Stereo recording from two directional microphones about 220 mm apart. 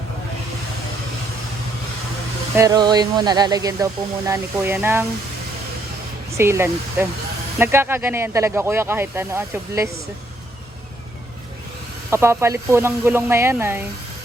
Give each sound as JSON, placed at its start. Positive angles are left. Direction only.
{"t": 2.6, "sound": "speech", "side_deg": -15}
{"t": 6.3, "sound": "speech", "side_deg": -10}
{"t": 12.1, "sound": "speech", "side_deg": -10}